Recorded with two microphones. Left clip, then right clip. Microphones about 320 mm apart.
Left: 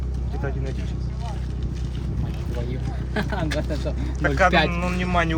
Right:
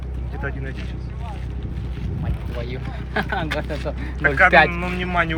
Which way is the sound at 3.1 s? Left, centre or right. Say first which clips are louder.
Right 3 dB; centre.